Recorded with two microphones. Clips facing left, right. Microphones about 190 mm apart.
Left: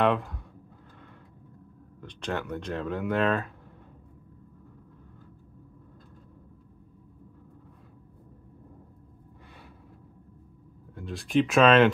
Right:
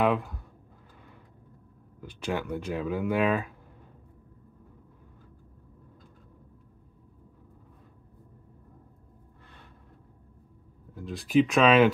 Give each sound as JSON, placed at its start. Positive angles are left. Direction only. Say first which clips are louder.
{"t": 0.0, "sound": "a sound", "louder": "left 1 dB", "side_deg": -5}
{"t": 2.0, "sound": "speech", "louder": "right 1 dB", "side_deg": -5}
{"t": 11.0, "sound": "speech", "louder": "right 2 dB", "side_deg": 0}